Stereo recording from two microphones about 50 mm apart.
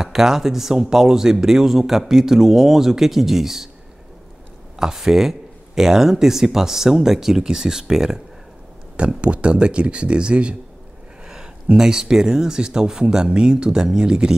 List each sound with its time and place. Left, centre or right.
0.0 s a man's voice: centre
4.7 s a man's voice: centre
9.2 s speech: right
11.7 s a man's voice: centre